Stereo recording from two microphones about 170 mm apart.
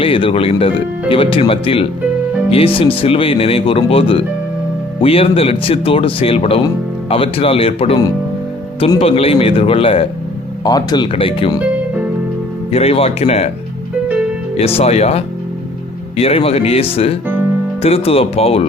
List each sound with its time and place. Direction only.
0.0 s speech: 30° left (ahead or behind)
9.0 s speech: 35° left (ahead or behind)
10.6 s speech: 25° left (ahead or behind)
12.7 s speech: 35° left (ahead or behind)
14.8 s speech: 40° left (ahead or behind)